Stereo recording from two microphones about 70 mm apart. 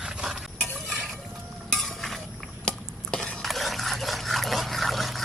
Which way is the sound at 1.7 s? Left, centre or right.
Centre.